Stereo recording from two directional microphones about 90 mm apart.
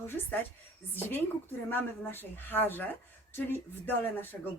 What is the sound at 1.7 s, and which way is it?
Speech, 25° left (ahead or behind).